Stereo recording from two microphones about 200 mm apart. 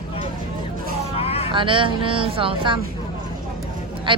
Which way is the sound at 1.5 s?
25° right (ahead or behind).